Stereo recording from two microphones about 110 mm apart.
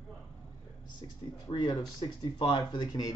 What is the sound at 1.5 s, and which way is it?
Speech, 35° left (ahead or behind).